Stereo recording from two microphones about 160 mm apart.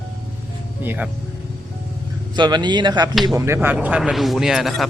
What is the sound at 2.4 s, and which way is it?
A man's voice, 30° right (ahead or behind).